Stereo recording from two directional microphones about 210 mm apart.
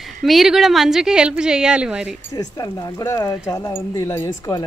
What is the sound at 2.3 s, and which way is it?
Speech, 15° left (ahead or behind).